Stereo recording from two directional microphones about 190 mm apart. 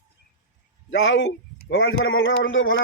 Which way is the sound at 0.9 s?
85° left.